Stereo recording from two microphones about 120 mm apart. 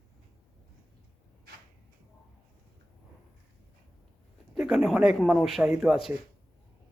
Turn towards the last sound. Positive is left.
turn(degrees=-5)  # may be behind; listen again after turning